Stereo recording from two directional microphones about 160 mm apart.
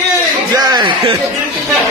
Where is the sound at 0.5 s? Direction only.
25° right (ahead or behind).